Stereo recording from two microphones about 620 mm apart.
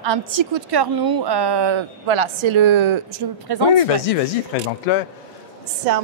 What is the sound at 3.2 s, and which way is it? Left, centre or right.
Speech, right.